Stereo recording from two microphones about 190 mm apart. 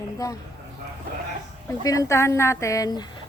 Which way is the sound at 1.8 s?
15° left (ahead or behind).